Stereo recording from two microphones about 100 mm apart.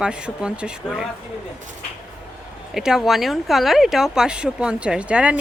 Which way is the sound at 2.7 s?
5° right (ahead or behind).